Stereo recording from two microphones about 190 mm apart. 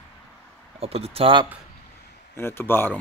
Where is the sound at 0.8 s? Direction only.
30° right (ahead or behind).